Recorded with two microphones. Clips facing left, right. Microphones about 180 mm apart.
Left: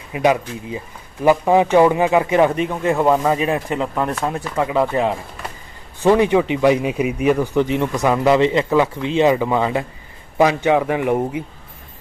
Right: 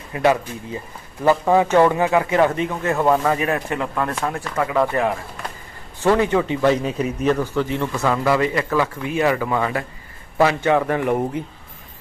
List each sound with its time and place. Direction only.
0.1 s speech: 15° left (ahead or behind)
6.0 s speech: 15° left (ahead or behind)